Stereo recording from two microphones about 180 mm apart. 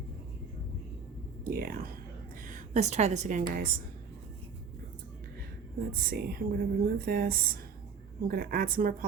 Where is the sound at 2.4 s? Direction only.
45° right (ahead or behind).